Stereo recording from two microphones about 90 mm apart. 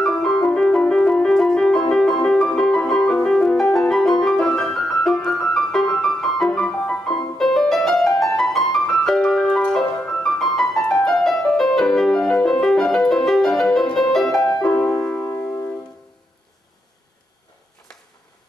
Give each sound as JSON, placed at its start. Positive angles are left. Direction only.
{"t": 0.0, "sound": "music", "side_deg": 5}
{"t": 14.7, "sound": "music", "side_deg": 15}